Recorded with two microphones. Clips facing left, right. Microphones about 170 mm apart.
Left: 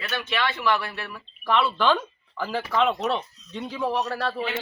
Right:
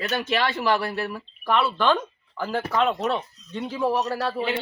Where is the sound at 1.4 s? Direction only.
5° right (ahead or behind).